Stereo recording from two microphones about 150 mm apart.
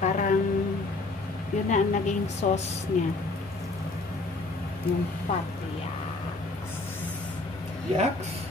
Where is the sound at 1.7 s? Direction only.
50° left (ahead or behind).